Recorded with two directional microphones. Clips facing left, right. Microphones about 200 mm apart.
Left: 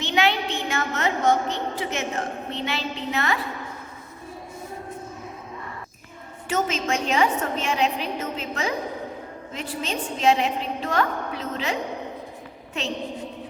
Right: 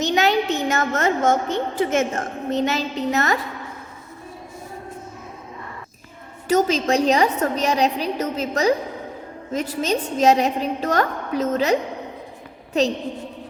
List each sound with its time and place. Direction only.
0.0 s a woman's voice: 40° right (ahead or behind)
6.5 s a woman's voice: 35° right (ahead or behind)